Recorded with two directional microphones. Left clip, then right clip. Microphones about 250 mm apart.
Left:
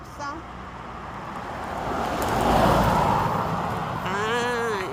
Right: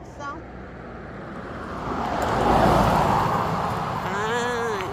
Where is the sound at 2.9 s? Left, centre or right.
Centre.